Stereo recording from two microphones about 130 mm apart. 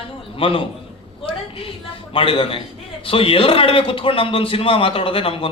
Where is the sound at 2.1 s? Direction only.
45° left (ahead or behind).